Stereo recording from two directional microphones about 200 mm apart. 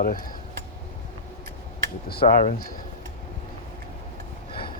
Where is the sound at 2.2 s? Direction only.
35° left (ahead or behind).